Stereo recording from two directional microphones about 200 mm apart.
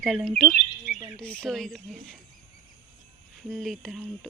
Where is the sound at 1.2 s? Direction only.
5° left (ahead or behind).